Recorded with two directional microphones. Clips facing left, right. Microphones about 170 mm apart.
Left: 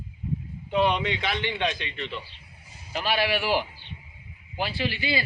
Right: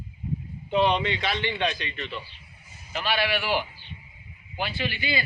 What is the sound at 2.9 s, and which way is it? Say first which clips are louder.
Speech: left 1 dB; 40° left (ahead or behind).